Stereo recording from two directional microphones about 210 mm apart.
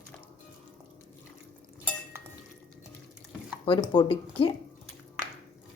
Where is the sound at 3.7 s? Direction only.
25° left (ahead or behind).